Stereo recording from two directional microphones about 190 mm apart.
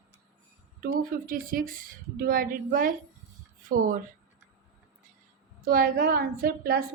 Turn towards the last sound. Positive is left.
turn(degrees=-50)  # may be behind; listen again after turning